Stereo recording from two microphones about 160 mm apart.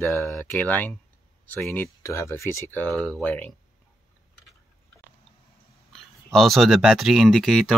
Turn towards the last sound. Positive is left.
turn(degrees=5)  # may be behind; listen again after turning